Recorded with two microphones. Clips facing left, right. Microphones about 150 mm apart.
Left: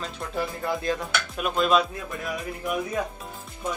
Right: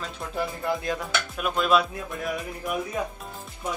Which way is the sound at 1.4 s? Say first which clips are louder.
Left 1 dB; 5° right (ahead or behind).